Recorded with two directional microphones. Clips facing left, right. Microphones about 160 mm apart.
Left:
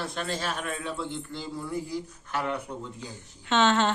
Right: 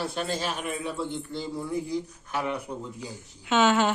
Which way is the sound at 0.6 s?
15° right (ahead or behind).